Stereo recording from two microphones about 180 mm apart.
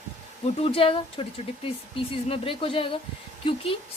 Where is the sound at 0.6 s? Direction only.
30° left (ahead or behind).